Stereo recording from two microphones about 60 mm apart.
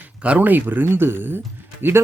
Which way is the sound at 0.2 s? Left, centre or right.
Right.